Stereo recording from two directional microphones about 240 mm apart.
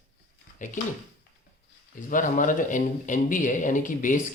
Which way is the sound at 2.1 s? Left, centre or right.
Left.